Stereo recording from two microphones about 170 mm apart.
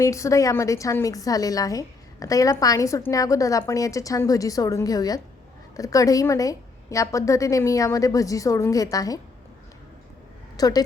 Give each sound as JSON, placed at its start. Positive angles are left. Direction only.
{"t": 0.0, "sound": "a woman's voice", "side_deg": 20}
{"t": 10.6, "sound": "a woman's voice", "side_deg": 20}